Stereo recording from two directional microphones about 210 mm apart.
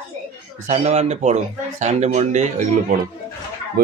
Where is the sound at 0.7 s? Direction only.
30° right (ahead or behind).